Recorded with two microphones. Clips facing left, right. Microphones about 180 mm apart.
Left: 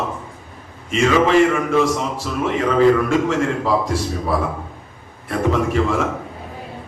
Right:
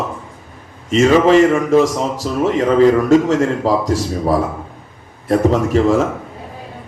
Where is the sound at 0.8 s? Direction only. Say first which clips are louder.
Right 5 dB; 40° right (ahead or behind).